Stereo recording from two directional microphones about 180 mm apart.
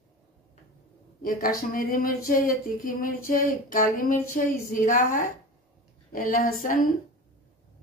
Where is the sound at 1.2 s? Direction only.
50° left (ahead or behind).